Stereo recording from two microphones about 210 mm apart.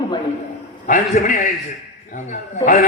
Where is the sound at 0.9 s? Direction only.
40° left (ahead or behind).